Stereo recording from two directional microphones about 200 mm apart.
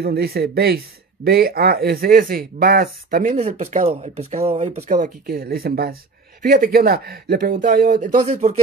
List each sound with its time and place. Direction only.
0.0 s speech: 50° right (ahead or behind); by 8.5 s 35° right (ahead or behind)